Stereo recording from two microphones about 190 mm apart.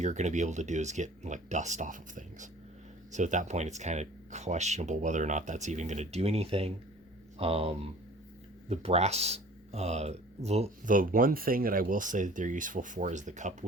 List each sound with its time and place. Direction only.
0.0 s speech: 40° right (ahead or behind)